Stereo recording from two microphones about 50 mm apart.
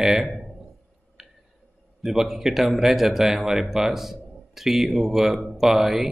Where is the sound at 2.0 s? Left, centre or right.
Centre.